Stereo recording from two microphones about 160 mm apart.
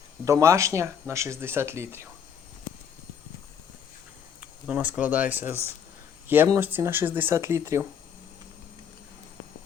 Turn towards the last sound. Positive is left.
turn(degrees=-15)  # may be behind; listen again after turning